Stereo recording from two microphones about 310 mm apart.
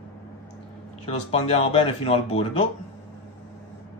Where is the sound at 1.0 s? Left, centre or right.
Centre.